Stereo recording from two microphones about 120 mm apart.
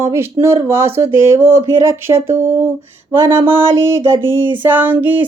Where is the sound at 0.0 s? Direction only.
20° right (ahead or behind).